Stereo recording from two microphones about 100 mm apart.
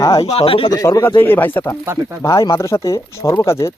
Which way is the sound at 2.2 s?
35° left (ahead or behind).